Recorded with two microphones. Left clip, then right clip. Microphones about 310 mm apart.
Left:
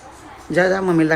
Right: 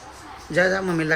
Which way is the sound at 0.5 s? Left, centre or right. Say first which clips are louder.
Left 4 dB; centre.